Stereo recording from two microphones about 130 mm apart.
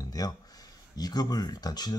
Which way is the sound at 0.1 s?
30° left (ahead or behind).